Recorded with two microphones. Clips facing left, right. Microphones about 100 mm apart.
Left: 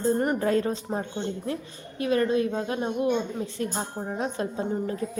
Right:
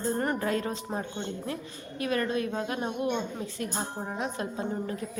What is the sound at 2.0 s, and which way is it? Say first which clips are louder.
Speech: left 5 dB; 30° left (ahead or behind).